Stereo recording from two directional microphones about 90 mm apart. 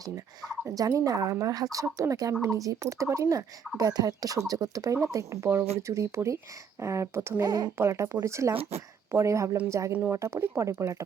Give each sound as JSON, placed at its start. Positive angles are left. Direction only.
{"t": 0.6, "sound": "speech", "side_deg": -40}
{"t": 7.4, "sound": "speech", "side_deg": -50}
{"t": 7.8, "sound": "speech", "side_deg": -30}